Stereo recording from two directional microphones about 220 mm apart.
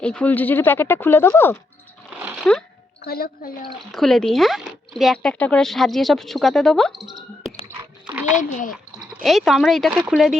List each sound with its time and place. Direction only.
0.0 s speech: 5° left (ahead or behind)
2.2 s a sound: centre (ahead or behind)
3.0 s a woman's voice: 45° left (ahead or behind)
3.9 s speech: centre (ahead or behind)
7.7 s a sound: 5° right (ahead or behind)
8.4 s a child's voice: 35° left (ahead or behind)
8.7 s speech: centre (ahead or behind)